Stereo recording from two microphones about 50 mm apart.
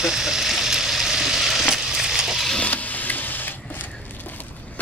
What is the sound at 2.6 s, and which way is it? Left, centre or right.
Printer, left.